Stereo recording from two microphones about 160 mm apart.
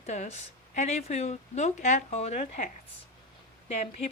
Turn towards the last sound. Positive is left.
turn(degrees=45)  # may be behind; listen again after turning